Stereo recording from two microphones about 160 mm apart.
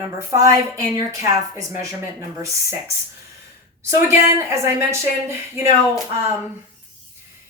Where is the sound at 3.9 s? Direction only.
15° right (ahead or behind).